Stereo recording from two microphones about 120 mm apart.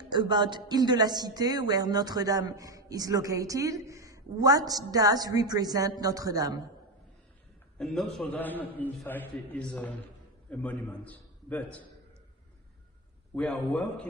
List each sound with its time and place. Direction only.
0.1 s speech: 40° right (ahead or behind)
7.7 s a man's voice: 5° left (ahead or behind)
8.4 s a man's voice: 15° left (ahead or behind)
13.3 s a man's voice: 10° left (ahead or behind)